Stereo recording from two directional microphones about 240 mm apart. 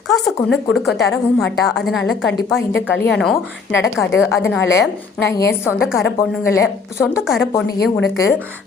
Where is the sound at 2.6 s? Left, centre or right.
Left.